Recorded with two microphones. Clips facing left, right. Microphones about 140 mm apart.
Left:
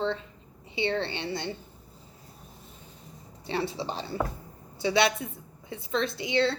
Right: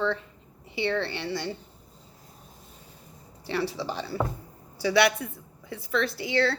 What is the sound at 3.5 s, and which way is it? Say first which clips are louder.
A woman's voice: right 1 dB; 25° left (ahead or behind).